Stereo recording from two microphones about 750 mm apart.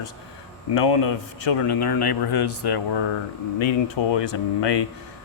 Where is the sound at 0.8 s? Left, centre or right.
Left.